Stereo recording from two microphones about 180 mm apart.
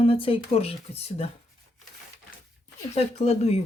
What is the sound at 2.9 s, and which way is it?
Speech, 35° left (ahead or behind).